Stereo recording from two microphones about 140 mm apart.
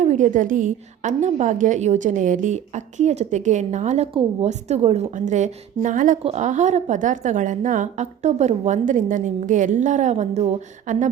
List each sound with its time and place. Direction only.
0.0 s a woman's voice: 60° right (ahead or behind)
6.2 s a woman's voice: 55° right (ahead or behind)
10.9 s speech: 70° right (ahead or behind)